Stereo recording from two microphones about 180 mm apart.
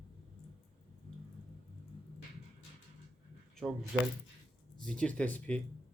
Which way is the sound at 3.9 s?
5° right (ahead or behind).